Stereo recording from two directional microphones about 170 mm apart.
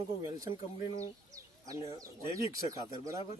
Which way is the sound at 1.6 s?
20° right (ahead or behind).